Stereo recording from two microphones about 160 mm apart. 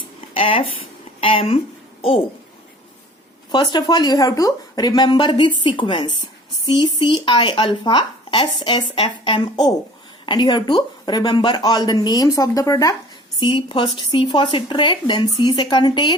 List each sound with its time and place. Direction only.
0.3 s a child's voice: 35° left (ahead or behind)
3.5 s speech: 30° left (ahead or behind)
13.4 s speech: 30° left (ahead or behind)